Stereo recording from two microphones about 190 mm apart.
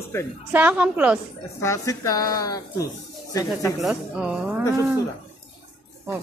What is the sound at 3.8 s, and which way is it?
Speech, 5° right (ahead or behind).